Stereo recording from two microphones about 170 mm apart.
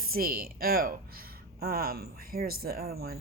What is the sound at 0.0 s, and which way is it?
A woman's voice, 60° right (ahead or behind).